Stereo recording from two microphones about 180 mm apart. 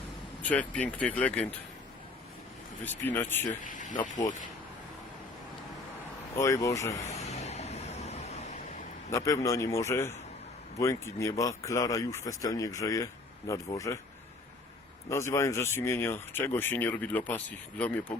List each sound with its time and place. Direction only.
0.4 s speech: 10° left (ahead or behind)
2.8 s speech: 10° left (ahead or behind)
3.5 s speech: 45° left (ahead or behind)
6.3 s speech: 15° left (ahead or behind)
7.0 s vehicle: 40° left (ahead or behind)
9.0 s speech: 15° left (ahead or behind)
15.1 s speech: 15° left (ahead or behind)